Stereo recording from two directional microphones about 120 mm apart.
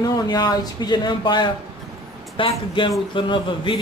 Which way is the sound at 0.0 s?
35° left (ahead or behind).